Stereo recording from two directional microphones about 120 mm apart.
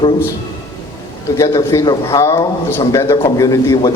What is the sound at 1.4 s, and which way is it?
A man's voice, 25° left (ahead or behind).